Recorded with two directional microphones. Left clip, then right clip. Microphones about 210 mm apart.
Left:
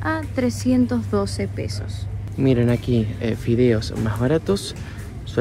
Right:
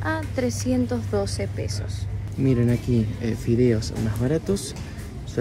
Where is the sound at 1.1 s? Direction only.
40° left (ahead or behind).